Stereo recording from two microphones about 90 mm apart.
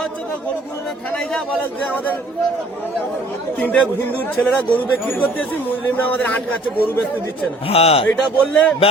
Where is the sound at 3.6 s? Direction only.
20° left (ahead or behind).